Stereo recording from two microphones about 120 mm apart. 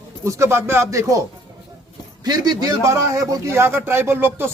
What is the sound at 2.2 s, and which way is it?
A man's voice, 35° right (ahead or behind).